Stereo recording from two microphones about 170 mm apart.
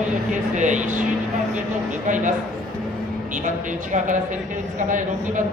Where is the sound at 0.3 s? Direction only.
45° right (ahead or behind).